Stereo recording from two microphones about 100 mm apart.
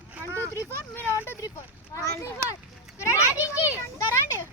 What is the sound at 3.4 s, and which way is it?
Speech, 20° right (ahead or behind).